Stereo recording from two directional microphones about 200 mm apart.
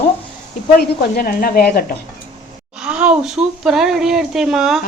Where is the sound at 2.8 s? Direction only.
5° right (ahead or behind).